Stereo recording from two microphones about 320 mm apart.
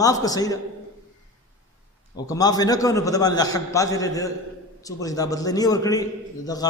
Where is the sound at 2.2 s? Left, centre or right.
Centre.